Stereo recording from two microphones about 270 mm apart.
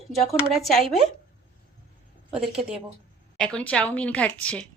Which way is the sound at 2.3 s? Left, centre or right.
Centre.